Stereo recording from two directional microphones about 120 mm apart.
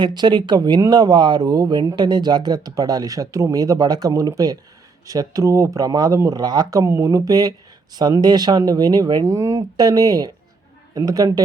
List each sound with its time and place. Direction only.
0.0 s speech: 40° right (ahead or behind)